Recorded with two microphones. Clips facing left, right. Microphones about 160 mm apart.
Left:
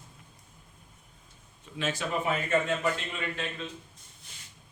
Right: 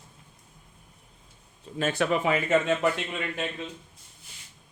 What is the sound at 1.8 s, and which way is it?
Speech, 55° right (ahead or behind).